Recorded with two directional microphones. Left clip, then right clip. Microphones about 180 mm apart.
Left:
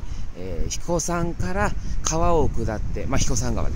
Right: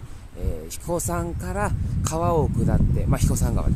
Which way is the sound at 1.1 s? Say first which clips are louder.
Left 2 dB; 5° right (ahead or behind).